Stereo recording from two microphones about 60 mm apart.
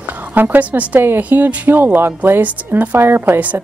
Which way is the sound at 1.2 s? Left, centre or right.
Right.